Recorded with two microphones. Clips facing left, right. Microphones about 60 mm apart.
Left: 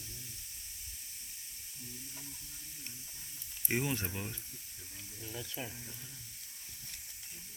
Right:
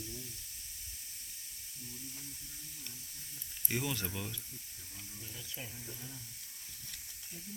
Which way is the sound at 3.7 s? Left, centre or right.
Left.